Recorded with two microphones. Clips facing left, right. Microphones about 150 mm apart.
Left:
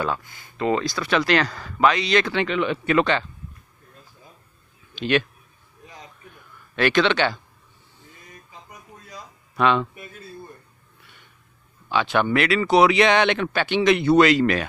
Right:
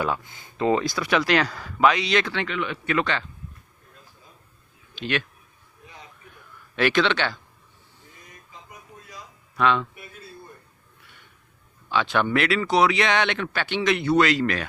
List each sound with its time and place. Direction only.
0.0 s speech: 15° right (ahead or behind)
2.3 s speech: 25° left (ahead or behind)
4.9 s speech: 20° left (ahead or behind)
6.7 s speech: 5° right (ahead or behind)
9.6 s speech: 20° left (ahead or behind)
11.9 s speech: 10° left (ahead or behind)